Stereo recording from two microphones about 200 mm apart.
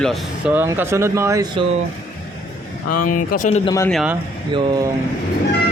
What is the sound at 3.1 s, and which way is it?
Speech, 40° left (ahead or behind).